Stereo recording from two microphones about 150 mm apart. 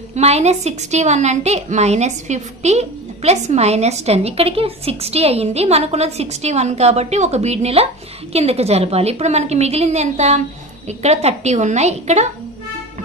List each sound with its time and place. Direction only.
0.1 s a woman's voice: 45° right (ahead or behind)